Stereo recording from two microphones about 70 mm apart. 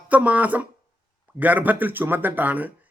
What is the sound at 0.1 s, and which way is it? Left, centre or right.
Speech, right.